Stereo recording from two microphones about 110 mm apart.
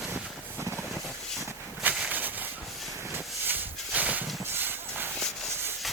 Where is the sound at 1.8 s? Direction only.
15° right (ahead or behind).